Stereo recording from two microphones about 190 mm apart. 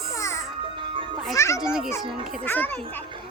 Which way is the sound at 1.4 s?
15° left (ahead or behind).